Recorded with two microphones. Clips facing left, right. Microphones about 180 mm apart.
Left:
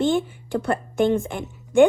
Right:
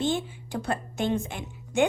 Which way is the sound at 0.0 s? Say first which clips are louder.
Left 6 dB; 55° left (ahead or behind).